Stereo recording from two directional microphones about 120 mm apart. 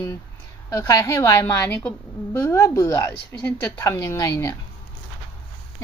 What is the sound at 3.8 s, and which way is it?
Speech, 25° left (ahead or behind).